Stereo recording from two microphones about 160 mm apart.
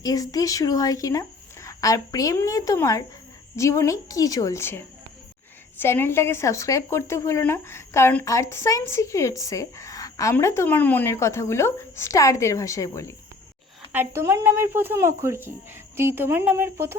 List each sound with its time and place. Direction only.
0.0 s speech: 20° left (ahead or behind)
13.9 s speech: 15° right (ahead or behind)